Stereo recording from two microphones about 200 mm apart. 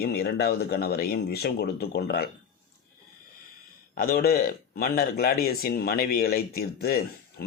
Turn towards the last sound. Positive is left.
turn(degrees=50)  # may be behind; listen again after turning